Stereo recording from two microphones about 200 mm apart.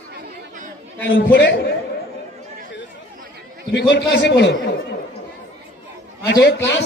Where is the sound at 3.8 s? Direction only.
60° left (ahead or behind).